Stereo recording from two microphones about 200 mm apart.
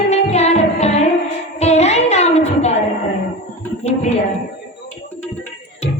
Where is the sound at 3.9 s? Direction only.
30° left (ahead or behind).